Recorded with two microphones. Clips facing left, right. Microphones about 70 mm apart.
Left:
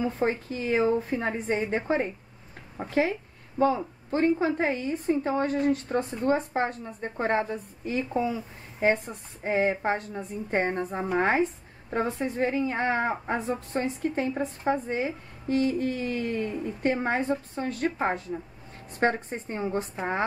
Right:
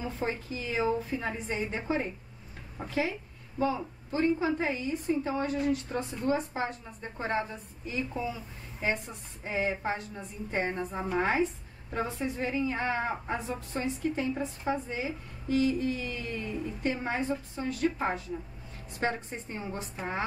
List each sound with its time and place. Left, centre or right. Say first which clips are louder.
0.0 s a woman's voice: left 7 dB; left
11.0 s a woman's voice: left 3 dB; left
11.9 s a woman's voice: left 4 dB; left